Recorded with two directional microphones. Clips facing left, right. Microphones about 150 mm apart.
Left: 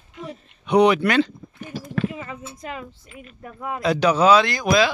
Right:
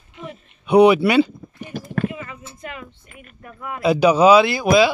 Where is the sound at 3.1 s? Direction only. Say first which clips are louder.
Left 3 dB; 50° right (ahead or behind).